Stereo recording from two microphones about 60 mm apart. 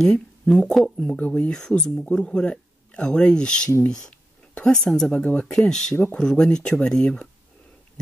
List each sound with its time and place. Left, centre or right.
0.0 s speech: centre
0.9 s speech: left
1.3 s speech: centre
4.7 s speech: centre
5.1 s speech: centre